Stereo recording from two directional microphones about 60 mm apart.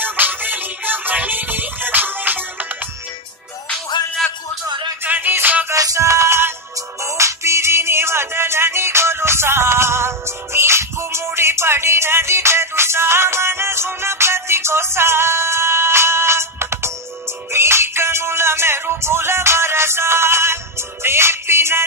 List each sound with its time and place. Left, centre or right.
0.0 s music: right
5.0 s music: right
5.8 s music: right